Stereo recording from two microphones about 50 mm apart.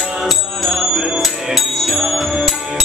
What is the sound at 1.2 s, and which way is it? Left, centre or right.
Music, centre.